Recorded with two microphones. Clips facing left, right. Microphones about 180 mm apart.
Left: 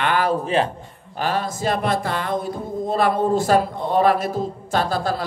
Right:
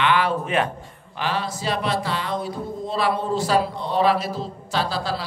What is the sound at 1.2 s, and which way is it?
A man's voice, 45° left (ahead or behind).